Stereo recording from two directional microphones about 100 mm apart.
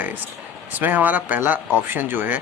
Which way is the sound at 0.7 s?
20° right (ahead or behind).